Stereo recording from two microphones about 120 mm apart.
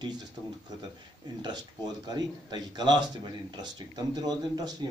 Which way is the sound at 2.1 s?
35° right (ahead or behind).